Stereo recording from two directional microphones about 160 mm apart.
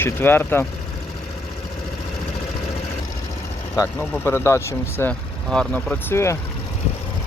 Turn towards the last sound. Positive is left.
turn(degrees=15)  # may be behind; listen again after turning